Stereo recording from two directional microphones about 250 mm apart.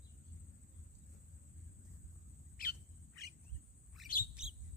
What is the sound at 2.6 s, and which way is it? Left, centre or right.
Bird, left.